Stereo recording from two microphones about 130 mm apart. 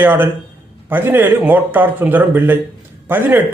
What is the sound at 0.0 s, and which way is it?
A man's voice, 15° right (ahead or behind).